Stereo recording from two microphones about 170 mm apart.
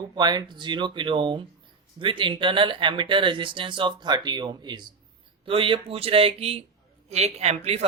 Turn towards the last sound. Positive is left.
turn(degrees=-40)  # may be behind; listen again after turning